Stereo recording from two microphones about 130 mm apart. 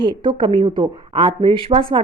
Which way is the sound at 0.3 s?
35° right (ahead or behind).